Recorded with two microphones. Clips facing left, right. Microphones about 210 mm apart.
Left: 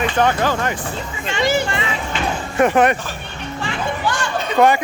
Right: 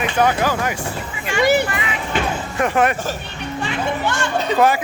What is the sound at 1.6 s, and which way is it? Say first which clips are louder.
Vehicle: left 2 dB; 30° left (ahead or behind).